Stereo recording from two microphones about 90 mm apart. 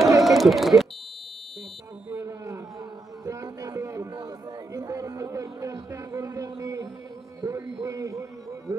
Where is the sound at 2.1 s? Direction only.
35° right (ahead or behind).